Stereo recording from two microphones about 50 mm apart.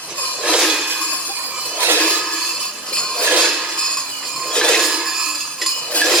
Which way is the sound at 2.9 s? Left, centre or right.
Centre.